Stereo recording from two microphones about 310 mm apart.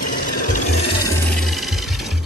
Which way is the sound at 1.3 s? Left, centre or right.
Centre.